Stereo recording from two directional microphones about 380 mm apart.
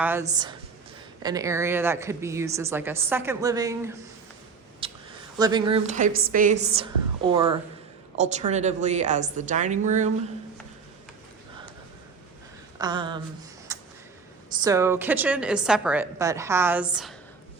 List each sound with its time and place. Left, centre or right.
0.0 s a woman's voice: centre
4.8 s a sound: centre
5.4 s a woman's voice: centre
12.8 s a woman's voice: centre
13.7 s a sound: centre
14.6 s a woman's voice: centre